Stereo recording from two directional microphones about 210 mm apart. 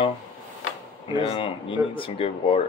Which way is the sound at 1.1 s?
25° left (ahead or behind).